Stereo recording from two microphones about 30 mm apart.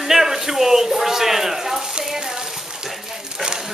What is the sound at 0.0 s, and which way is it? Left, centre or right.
Speech, centre.